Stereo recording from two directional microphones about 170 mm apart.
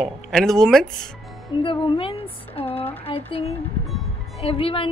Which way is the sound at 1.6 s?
30° left (ahead or behind).